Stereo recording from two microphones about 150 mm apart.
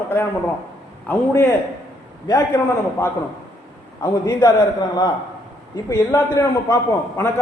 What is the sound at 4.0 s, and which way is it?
Speech, 20° left (ahead or behind).